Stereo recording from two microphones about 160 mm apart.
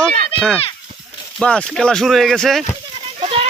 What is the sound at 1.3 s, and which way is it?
Speech, 5° left (ahead or behind).